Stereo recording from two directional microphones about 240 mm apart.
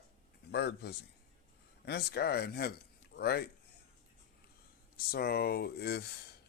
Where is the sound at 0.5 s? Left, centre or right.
Left.